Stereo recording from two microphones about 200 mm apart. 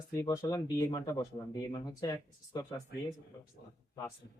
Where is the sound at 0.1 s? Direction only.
15° left (ahead or behind).